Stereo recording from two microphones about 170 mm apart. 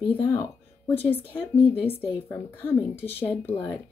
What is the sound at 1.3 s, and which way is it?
Speech, 35° left (ahead or behind).